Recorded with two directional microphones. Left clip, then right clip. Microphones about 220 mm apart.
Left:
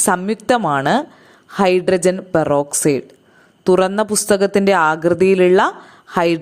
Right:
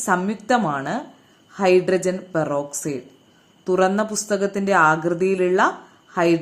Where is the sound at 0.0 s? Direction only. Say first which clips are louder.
Left 4 dB; 45° left (ahead or behind).